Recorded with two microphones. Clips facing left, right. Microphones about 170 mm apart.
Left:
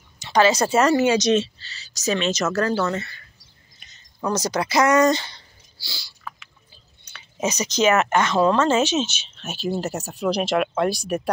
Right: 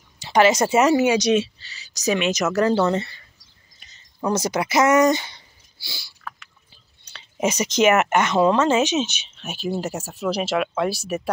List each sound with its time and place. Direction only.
0.2 s speech: 25° right (ahead or behind)
4.2 s speech: 25° right (ahead or behind)
7.1 s a sound: 35° right (ahead or behind)
7.4 s speech: 25° right (ahead or behind); by 11.2 s 5° right (ahead or behind)